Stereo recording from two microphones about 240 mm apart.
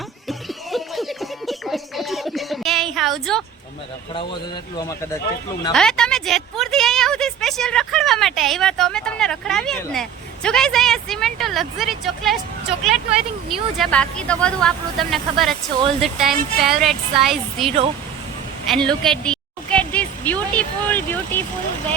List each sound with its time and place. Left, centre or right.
0.3 s a sound: centre
4.1 s speech: left
5.7 s a woman's voice: centre